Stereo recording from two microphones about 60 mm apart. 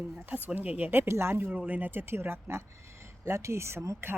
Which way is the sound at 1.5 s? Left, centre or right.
Right.